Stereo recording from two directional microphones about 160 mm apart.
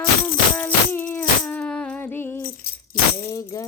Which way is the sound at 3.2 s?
20° left (ahead or behind).